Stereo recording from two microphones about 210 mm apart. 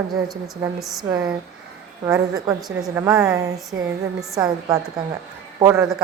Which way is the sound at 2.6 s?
Centre (ahead or behind).